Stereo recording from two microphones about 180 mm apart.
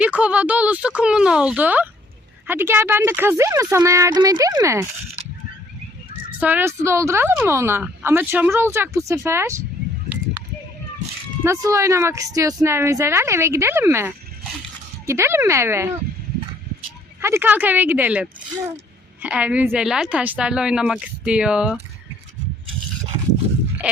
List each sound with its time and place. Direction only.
0.0 s speech: 5° right (ahead or behind)
6.4 s speech: 10° right (ahead or behind)
11.4 s speech: 15° right (ahead or behind)
17.2 s speech: 15° right (ahead or behind)
23.8 s speech: 5° right (ahead or behind)